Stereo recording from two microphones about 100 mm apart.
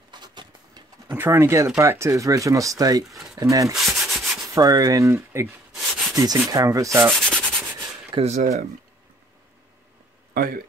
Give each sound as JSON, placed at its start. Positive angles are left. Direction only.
{"t": 0.1, "sound": "a sound", "side_deg": -45}
{"t": 1.1, "sound": "speech", "side_deg": -25}
{"t": 3.7, "sound": "sanding", "side_deg": 0}
{"t": 4.5, "sound": "speech", "side_deg": -40}
{"t": 5.8, "sound": "a sound", "side_deg": 0}
{"t": 6.1, "sound": "speech", "side_deg": -35}
{"t": 7.2, "sound": "sanding", "side_deg": 5}
{"t": 8.2, "sound": "speech", "side_deg": -90}